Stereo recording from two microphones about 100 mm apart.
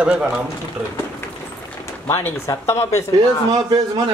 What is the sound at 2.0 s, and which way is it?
A man's voice, 25° left (ahead or behind).